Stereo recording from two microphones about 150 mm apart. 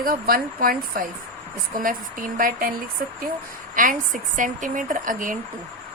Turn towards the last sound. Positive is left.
turn(degrees=-65)  # may be behind; listen again after turning